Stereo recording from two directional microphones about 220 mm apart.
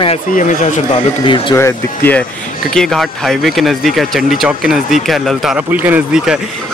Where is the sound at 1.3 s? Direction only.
15° left (ahead or behind); by 6.4 s 5° right (ahead or behind).